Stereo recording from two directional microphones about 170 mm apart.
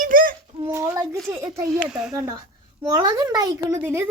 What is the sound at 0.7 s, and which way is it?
Speech, 20° right (ahead or behind).